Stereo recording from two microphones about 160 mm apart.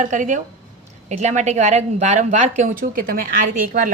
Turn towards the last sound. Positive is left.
turn(degrees=-60)  # may be behind; listen again after turning